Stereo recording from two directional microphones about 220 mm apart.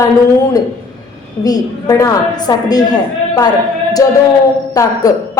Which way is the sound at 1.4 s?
15° left (ahead or behind).